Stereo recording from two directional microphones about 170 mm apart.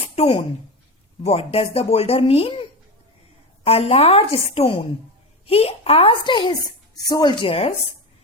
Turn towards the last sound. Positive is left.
turn(degrees=35)  # may be behind; listen again after turning